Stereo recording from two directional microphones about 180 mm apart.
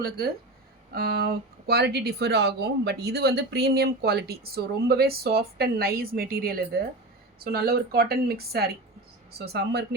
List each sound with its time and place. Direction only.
0.0 s speech: 55° right (ahead or behind)